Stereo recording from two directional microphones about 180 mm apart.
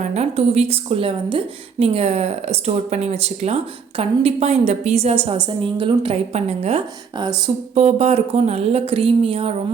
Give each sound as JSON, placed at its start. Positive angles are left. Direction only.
{"t": 0.0, "sound": "a woman's voice", "side_deg": -40}
{"t": 7.8, "sound": "a woman's voice", "side_deg": -40}